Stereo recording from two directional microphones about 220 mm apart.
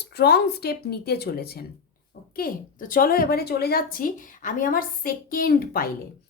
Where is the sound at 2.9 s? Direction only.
40° left (ahead or behind).